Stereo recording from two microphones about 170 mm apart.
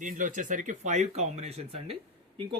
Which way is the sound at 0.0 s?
50° right (ahead or behind).